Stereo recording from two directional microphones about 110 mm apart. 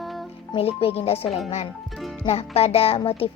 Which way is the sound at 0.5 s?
60° left (ahead or behind).